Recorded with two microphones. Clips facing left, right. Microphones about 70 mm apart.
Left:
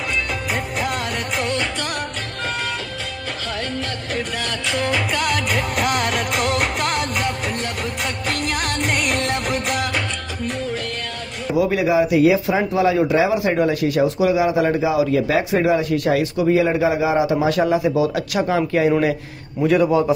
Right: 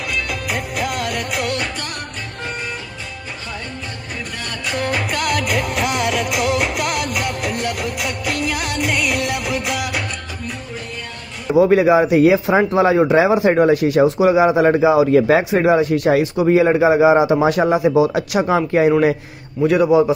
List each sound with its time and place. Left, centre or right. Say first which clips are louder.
0.5 s music: right 1 dB; centre
4.9 s music: right 1 dB; centre
11.5 s speech: right 5 dB; right
19.6 s a man's voice: right 3 dB; centre